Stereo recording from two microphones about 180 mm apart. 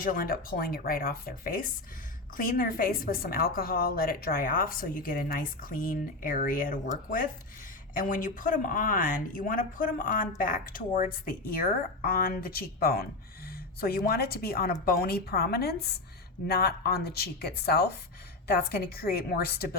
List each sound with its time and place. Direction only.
0.0 s a woman's voice: 50° left (ahead or behind)
7.9 s speech: 50° left (ahead or behind)